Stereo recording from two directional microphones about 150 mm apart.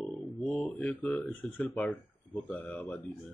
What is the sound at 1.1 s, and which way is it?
Speech, centre (ahead or behind).